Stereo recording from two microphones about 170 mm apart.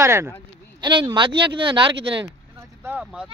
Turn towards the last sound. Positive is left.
turn(degrees=-5)  # may be behind; listen again after turning